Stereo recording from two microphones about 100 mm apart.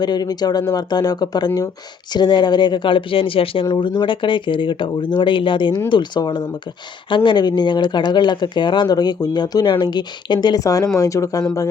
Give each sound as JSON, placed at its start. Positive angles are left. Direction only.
{"t": 0.0, "sound": "speech", "side_deg": 45}
{"t": 4.0, "sound": "speech", "side_deg": 55}